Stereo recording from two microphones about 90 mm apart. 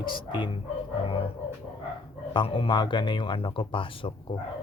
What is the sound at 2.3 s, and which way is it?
Speech, 80° left.